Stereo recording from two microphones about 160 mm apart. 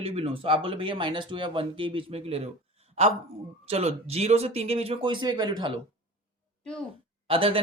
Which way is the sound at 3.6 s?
40° right (ahead or behind).